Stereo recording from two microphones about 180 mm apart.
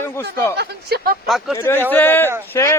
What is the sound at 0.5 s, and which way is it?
Speech, 65° right (ahead or behind).